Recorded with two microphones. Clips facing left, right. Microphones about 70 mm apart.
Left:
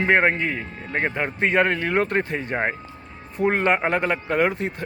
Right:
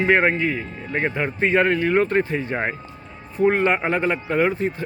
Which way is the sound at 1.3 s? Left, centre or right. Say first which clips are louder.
Right 2 dB; left.